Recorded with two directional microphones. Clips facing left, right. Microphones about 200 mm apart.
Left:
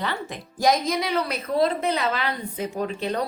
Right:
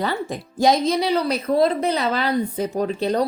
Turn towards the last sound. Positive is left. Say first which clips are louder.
# right 5 dB
turn(degrees=-40)  # may be behind; listen again after turning